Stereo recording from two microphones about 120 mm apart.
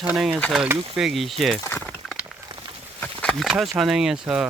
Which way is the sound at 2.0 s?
Centre (ahead or behind).